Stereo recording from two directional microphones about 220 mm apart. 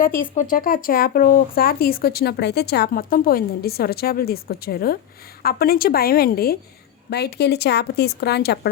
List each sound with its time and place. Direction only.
0.3 s speech: 40° left (ahead or behind)